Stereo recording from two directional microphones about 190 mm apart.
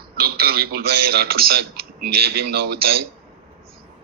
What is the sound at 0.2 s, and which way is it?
A man's voice, 55° right (ahead or behind).